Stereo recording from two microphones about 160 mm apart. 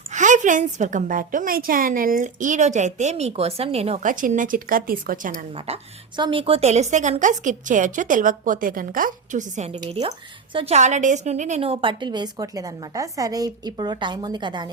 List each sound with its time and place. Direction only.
0.1 s a woman's voice: 50° right (ahead or behind)
4.0 s a woman's voice: 55° right (ahead or behind)
5.5 s a woman's voice: 40° right (ahead or behind)